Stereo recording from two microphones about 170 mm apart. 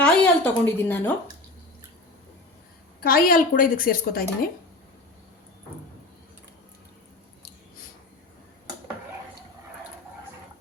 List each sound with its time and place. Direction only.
0.0 s speech: 5° left (ahead or behind)
3.0 s a woman's voice: 60° left (ahead or behind)